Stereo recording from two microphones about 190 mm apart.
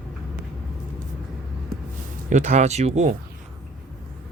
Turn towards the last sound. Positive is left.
turn(degrees=-35)  # may be behind; listen again after turning